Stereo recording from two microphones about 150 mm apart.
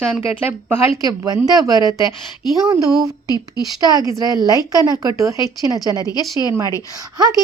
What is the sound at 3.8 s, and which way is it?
Speech, 25° right (ahead or behind).